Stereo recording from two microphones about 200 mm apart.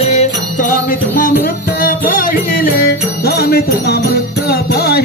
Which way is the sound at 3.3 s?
50° left (ahead or behind).